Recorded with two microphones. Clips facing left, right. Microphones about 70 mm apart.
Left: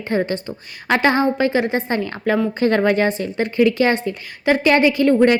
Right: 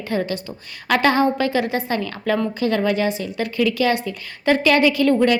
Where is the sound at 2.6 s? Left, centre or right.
Left.